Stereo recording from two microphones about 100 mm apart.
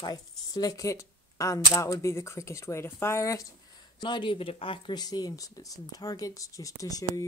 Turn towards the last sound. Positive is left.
turn(degrees=35)  # may be behind; listen again after turning